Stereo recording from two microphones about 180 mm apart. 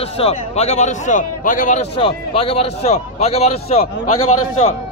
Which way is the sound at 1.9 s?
30° left (ahead or behind).